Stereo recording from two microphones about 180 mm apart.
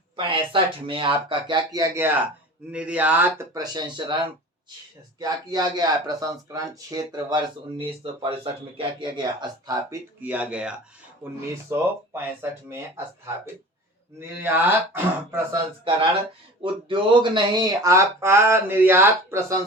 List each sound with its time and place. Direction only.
0.2 s speech: 30° right (ahead or behind)
5.2 s speech: 20° right (ahead or behind)
10.2 s speech: 10° right (ahead or behind)
14.2 s speech: 10° right (ahead or behind)
16.6 s speech: 25° right (ahead or behind)